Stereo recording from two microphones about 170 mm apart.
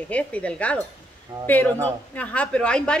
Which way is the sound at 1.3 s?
25° right (ahead or behind).